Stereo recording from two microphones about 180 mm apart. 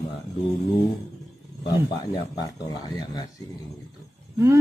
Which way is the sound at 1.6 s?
25° left (ahead or behind).